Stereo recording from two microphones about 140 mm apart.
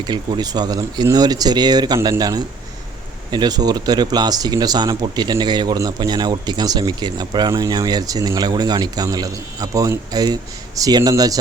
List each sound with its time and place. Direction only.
0.0 s speech: 30° right (ahead or behind)